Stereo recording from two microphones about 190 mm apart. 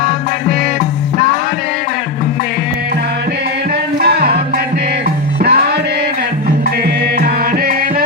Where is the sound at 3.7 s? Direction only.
55° right (ahead or behind).